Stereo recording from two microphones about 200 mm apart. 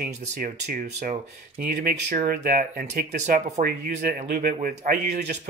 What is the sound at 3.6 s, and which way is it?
Speech, 50° right (ahead or behind).